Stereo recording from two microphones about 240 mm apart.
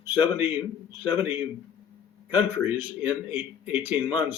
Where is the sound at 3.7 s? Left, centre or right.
Left.